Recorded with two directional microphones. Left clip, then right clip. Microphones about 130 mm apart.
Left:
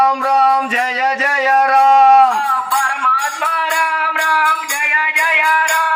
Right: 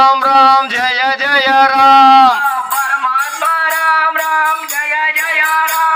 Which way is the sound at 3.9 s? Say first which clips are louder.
Right 3 dB; 20° left (ahead or behind).